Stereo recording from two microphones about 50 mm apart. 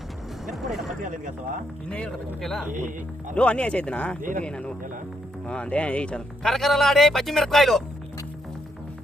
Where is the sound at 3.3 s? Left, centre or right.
Left.